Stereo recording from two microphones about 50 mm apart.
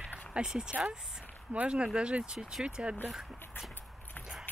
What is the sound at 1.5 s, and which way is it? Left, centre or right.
Speech, right.